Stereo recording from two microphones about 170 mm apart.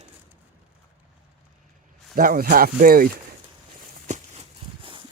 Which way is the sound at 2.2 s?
55° right (ahead or behind).